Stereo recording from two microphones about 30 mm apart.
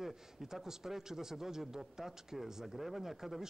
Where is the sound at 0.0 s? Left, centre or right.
Centre.